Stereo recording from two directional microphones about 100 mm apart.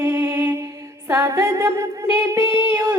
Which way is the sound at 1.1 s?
30° right (ahead or behind).